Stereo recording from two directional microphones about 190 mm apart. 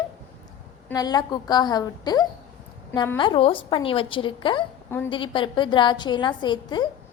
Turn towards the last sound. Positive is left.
turn(degrees=25)  # may be behind; listen again after turning